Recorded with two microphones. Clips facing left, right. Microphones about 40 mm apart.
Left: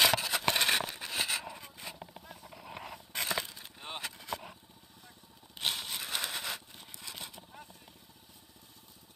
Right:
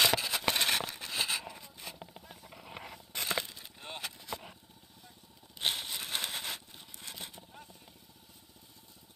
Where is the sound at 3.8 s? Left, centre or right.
Left.